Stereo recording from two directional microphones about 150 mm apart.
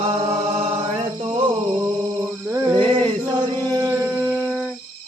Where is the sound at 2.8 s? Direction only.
30° right (ahead or behind); by 4.7 s 10° right (ahead or behind).